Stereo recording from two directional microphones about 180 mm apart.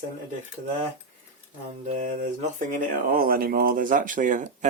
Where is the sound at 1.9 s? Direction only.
35° right (ahead or behind).